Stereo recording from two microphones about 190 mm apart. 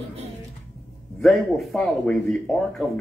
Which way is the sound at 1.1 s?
Centre (ahead or behind).